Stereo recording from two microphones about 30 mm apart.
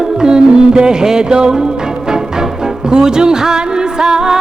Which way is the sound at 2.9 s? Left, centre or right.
Right.